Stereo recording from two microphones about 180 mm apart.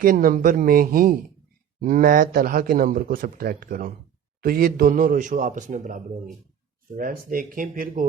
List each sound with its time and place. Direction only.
0.0 s speech: 50° right (ahead or behind)